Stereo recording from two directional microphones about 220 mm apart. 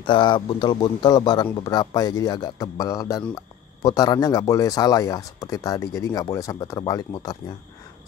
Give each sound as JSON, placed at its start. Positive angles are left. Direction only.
{"t": 0.0, "sound": "speech", "side_deg": 20}